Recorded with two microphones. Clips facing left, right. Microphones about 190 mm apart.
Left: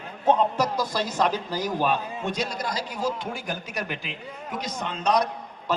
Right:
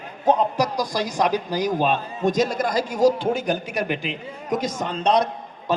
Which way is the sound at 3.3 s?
15° right (ahead or behind).